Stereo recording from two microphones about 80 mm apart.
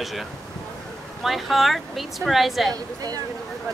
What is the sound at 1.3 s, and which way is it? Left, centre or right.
Speech, centre.